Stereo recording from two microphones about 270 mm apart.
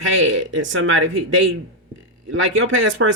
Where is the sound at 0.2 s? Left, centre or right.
Right.